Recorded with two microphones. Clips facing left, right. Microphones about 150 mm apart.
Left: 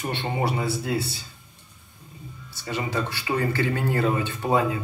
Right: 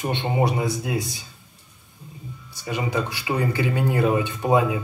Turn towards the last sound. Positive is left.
turn(degrees=-15)  # may be behind; listen again after turning